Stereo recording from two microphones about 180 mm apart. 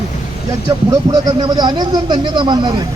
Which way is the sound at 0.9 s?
25° right (ahead or behind).